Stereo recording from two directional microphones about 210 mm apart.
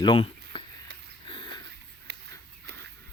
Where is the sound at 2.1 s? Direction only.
55° right (ahead or behind).